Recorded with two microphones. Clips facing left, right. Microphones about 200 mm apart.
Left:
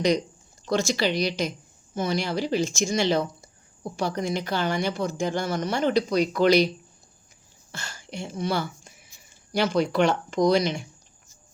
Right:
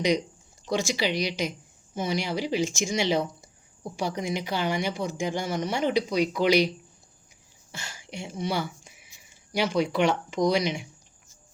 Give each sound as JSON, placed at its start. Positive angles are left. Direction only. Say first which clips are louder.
{"t": 0.6, "sound": "speech", "louder": "left 3 dB", "side_deg": -15}
{"t": 7.7, "sound": "speech", "louder": "left 2 dB", "side_deg": -15}